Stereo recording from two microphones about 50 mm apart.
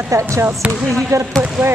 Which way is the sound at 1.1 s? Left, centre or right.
Right.